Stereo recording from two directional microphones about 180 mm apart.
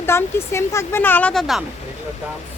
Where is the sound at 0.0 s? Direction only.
15° left (ahead or behind).